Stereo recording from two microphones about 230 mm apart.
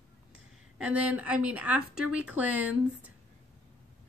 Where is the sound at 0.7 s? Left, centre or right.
Centre.